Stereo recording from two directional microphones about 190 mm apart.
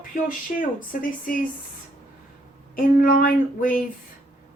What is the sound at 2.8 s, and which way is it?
Speech, 50° left (ahead or behind).